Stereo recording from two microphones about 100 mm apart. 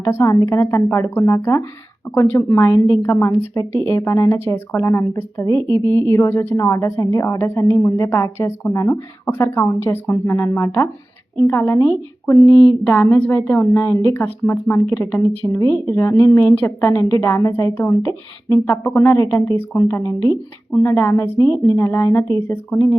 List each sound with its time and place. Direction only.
0.0 s a woman's voice: 25° left (ahead or behind)
12.9 s a woman's voice: 20° left (ahead or behind)
13.6 s a woman's voice: 30° left (ahead or behind)
15.5 s a woman's voice: 35° left (ahead or behind)
16.9 s a woman's voice: 35° left (ahead or behind)